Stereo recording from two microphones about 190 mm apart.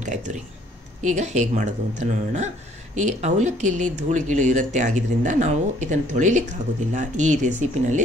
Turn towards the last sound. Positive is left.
turn(degrees=-40)  # may be behind; listen again after turning